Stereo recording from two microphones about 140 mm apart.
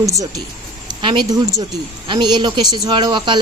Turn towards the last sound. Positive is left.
turn(degrees=-35)  # may be behind; listen again after turning